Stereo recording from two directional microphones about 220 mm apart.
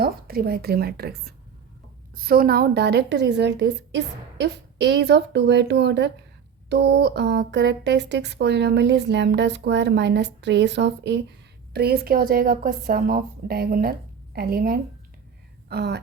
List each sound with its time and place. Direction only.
0.0 s a woman's voice: 45° right (ahead or behind)